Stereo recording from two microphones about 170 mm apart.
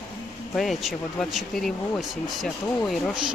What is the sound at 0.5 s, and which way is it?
Speech, centre (ahead or behind).